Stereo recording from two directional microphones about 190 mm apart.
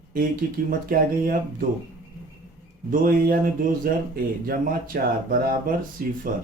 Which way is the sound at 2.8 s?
45° right (ahead or behind).